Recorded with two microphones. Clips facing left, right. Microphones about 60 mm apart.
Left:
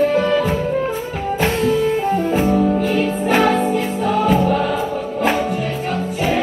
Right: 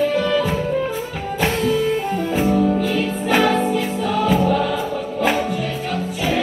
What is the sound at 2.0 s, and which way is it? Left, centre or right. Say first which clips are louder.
Music: left 3 dB; centre.